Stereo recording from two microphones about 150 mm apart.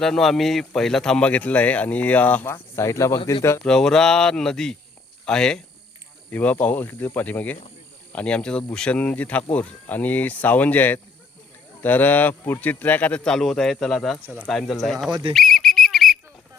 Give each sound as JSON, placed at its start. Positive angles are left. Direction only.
{"t": 0.0, "sound": "speech", "side_deg": 0}
{"t": 3.6, "sound": "speech", "side_deg": 5}
{"t": 15.3, "sound": "a sound", "side_deg": 0}